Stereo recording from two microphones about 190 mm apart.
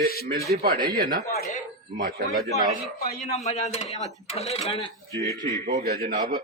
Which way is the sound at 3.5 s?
35° left (ahead or behind).